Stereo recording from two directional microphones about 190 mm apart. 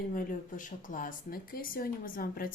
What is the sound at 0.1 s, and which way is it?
Speech, 45° left (ahead or behind).